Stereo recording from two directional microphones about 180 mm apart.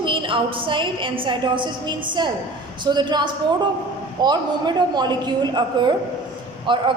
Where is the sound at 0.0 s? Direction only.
30° right (ahead or behind).